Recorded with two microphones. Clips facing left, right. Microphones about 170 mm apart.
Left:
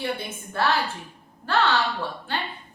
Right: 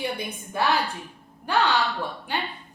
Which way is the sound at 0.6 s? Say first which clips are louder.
Even; 15° right (ahead or behind).